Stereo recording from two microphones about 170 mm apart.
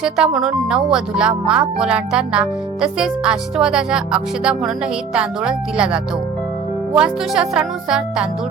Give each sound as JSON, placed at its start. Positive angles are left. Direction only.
{"t": 0.0, "sound": "speech", "side_deg": -5}